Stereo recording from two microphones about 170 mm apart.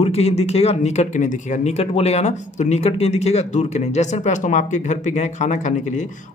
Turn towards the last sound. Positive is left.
turn(degrees=45)  # may be behind; listen again after turning